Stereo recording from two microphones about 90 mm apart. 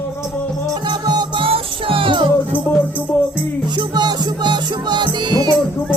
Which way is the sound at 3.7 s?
55° right (ahead or behind).